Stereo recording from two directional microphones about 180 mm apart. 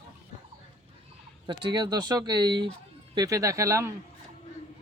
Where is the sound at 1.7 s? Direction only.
25° right (ahead or behind).